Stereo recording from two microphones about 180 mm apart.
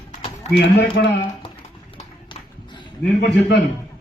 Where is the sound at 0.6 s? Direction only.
80° left.